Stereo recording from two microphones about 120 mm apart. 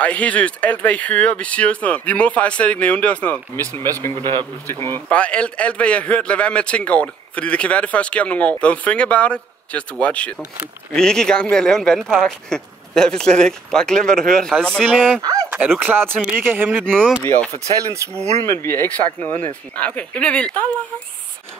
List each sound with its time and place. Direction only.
0.0 s a man's voice: 10° left (ahead or behind)
5.1 s a man's voice: 10° left (ahead or behind)
15.9 s speech: 20° right (ahead or behind)
16.8 s a man's voice: 5° left (ahead or behind)
17.2 s a man's voice: 15° left (ahead or behind)
17.7 s speech: 25° right (ahead or behind)
18.5 s speech: 25° left (ahead or behind)
18.9 s a man's voice: 15° left (ahead or behind)